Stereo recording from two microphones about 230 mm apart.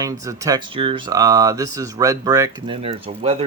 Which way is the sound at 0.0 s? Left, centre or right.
Centre.